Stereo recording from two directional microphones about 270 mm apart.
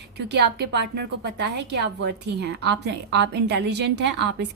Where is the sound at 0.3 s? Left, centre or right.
Right.